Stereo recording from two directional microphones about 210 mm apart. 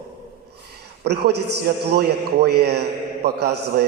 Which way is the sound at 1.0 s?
50° right (ahead or behind).